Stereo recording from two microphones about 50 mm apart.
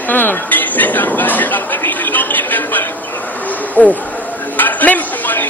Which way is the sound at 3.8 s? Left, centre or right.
Left.